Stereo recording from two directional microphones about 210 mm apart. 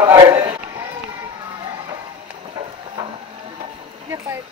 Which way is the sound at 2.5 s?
25° right (ahead or behind).